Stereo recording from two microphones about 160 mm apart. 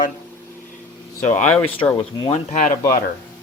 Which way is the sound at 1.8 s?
20° left (ahead or behind).